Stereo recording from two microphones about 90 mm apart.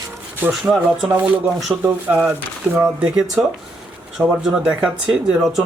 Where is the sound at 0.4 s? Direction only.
20° right (ahead or behind).